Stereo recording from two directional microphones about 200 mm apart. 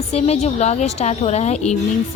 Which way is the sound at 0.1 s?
30° left (ahead or behind).